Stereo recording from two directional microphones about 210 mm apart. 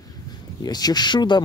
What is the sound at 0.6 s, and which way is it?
Speech, 20° left (ahead or behind).